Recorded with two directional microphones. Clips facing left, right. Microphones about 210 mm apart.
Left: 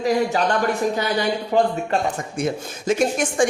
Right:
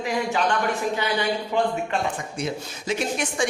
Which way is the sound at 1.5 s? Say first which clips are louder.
Left 6 dB; 40° left (ahead or behind).